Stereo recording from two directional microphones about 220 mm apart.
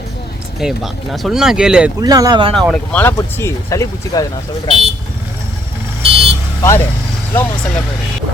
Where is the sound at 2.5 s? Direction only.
Centre (ahead or behind).